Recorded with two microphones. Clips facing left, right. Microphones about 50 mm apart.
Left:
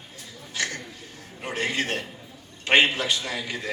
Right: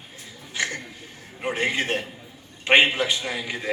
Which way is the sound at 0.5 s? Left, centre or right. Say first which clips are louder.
Right 2 dB; right.